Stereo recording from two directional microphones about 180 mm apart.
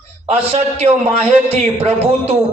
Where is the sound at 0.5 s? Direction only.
35° right (ahead or behind).